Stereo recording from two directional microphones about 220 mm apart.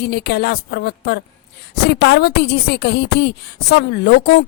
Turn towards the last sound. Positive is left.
turn(degrees=50)  # may be behind; listen again after turning